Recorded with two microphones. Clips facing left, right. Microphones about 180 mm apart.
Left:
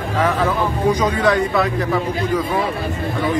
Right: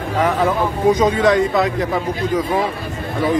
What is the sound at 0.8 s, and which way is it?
Speech, 25° right (ahead or behind).